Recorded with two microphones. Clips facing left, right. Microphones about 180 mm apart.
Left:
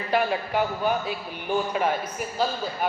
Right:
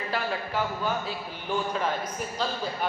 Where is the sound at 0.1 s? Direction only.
20° left (ahead or behind).